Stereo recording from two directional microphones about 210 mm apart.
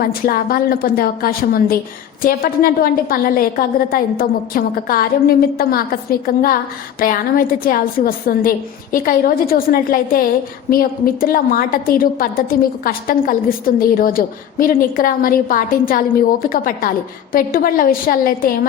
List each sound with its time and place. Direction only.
0.0 s a woman's voice: 45° left (ahead or behind)